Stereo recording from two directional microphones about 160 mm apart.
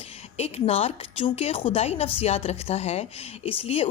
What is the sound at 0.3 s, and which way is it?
A woman's voice, 40° left (ahead or behind).